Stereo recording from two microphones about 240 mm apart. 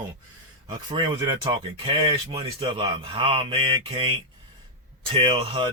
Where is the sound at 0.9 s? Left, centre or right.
Centre.